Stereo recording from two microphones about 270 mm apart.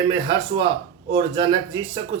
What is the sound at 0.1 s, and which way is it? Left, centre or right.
Mantra, centre.